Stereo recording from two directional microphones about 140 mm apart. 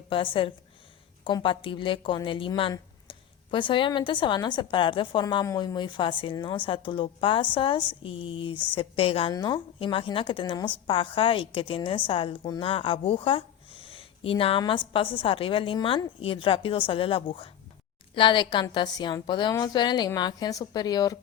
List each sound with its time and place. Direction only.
0.1 s a woman's voice: 35° left (ahead or behind)